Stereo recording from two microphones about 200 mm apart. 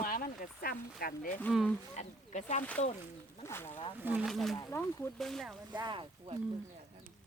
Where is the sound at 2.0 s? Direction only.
35° left (ahead or behind).